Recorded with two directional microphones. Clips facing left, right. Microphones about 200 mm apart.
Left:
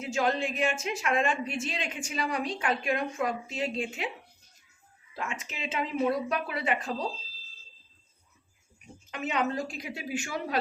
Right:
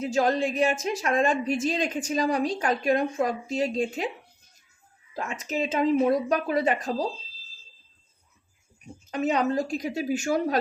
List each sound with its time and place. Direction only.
0.0 s a woman's voice: 35° right (ahead or behind)
5.1 s a woman's voice: 40° right (ahead or behind)
9.0 s a woman's voice: 40° right (ahead or behind)